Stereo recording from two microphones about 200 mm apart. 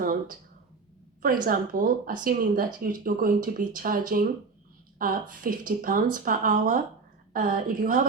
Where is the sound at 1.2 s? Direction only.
45° right (ahead or behind).